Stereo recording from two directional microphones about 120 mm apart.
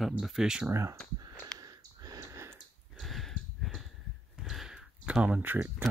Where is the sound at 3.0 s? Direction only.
Centre (ahead or behind); by 5.9 s 15° right (ahead or behind).